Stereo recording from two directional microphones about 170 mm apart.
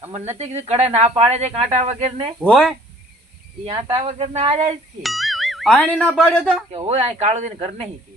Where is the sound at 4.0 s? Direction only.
40° right (ahead or behind).